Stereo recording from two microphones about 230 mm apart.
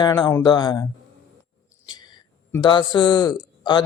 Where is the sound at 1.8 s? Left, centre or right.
Centre.